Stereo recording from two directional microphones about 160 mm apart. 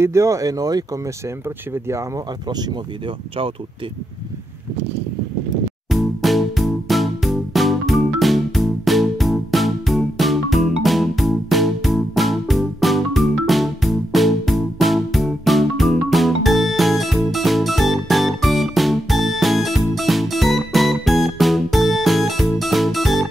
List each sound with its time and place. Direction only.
0.0 s speech: 20° right (ahead or behind)
5.9 s music: centre (ahead or behind)